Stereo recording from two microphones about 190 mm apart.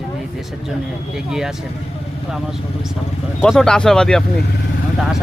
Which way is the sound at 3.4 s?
5° left (ahead or behind).